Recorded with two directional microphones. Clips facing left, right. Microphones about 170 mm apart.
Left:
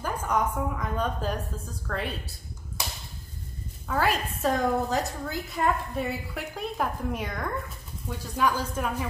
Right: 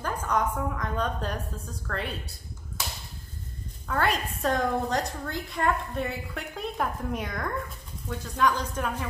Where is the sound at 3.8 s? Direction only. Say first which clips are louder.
Left 1 dB; 5° left (ahead or behind).